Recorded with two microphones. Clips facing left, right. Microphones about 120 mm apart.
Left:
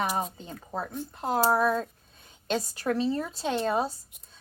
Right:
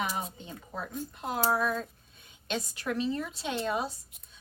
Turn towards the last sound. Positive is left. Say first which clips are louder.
# left 5 dB
turn(degrees=35)  # may be behind; listen again after turning